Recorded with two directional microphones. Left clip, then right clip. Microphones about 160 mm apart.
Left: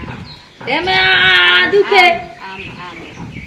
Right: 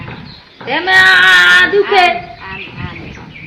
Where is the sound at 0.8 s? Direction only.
15° left (ahead or behind).